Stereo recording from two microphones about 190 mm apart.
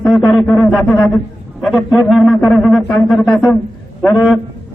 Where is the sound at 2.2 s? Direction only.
5° left (ahead or behind).